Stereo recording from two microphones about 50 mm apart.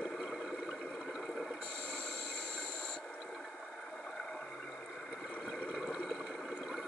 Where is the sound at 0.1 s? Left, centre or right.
Centre.